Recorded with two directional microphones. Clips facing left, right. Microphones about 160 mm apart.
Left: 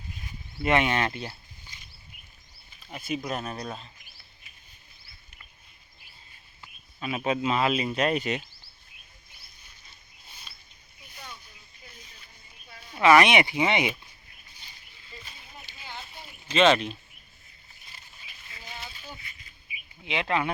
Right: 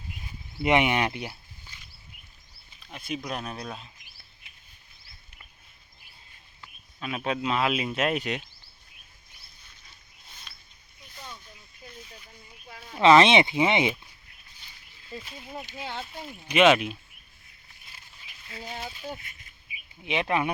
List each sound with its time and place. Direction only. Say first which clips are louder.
0.6 s speech: right 1 dB; 20° right (ahead or behind)
2.8 s speech: left 2 dB; 5° left (ahead or behind)
7.0 s speech: left 2 dB; centre (ahead or behind)
13.0 s speech: right 2 dB; 25° right (ahead or behind)
16.5 s speech: right 1 dB; 10° right (ahead or behind)
18.8 s a sound: right 6 dB; 45° right (ahead or behind)
20.1 s speech: right 1 dB; 20° right (ahead or behind)